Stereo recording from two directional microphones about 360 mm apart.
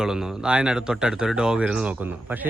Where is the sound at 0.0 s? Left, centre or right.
Centre.